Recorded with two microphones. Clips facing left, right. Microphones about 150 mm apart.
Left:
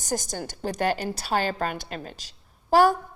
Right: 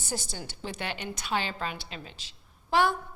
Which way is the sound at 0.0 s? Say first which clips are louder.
Left 7 dB; 45° left (ahead or behind).